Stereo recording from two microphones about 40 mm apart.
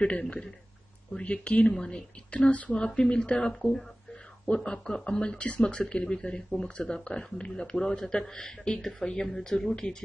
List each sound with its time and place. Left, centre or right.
1.1 s speech: left; by 9.8 s centre
9.8 s speech: left